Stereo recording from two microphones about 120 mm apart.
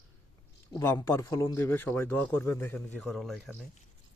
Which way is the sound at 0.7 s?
25° left (ahead or behind).